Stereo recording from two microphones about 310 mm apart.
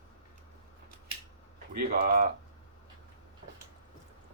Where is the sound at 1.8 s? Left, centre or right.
Right.